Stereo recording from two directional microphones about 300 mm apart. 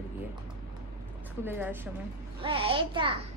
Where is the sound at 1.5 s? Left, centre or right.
Centre.